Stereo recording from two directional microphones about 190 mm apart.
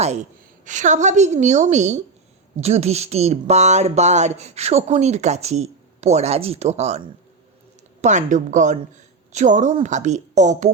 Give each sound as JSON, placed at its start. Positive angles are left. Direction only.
{"t": 0.0, "sound": "speech", "side_deg": -35}
{"t": 8.0, "sound": "speech", "side_deg": -40}